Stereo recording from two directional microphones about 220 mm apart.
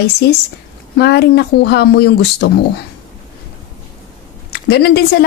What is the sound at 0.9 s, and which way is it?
A woman's voice, 50° left (ahead or behind).